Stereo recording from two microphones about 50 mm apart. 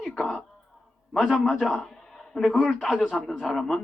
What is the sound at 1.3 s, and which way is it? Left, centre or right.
Speech, left.